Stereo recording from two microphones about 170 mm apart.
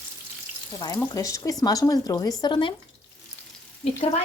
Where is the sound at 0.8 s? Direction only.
20° left (ahead or behind).